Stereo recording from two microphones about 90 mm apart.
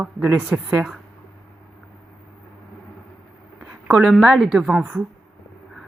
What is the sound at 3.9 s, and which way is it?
Speech, centre (ahead or behind).